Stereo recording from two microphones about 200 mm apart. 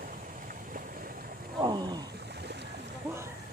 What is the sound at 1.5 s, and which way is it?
Roaring cats, 20° right (ahead or behind).